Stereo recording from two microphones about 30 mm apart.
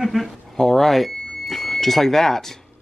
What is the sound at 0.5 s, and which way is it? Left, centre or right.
Speech, centre.